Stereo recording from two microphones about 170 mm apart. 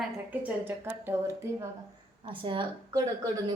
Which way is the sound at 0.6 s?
15° right (ahead or behind).